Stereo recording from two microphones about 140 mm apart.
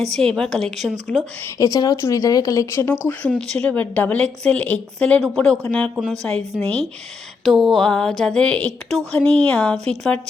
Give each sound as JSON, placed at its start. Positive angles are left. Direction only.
{"t": 0.0, "sound": "speech", "side_deg": 5}
{"t": 1.5, "sound": "a woman's voice", "side_deg": 25}
{"t": 3.1, "sound": "a woman's voice", "side_deg": 5}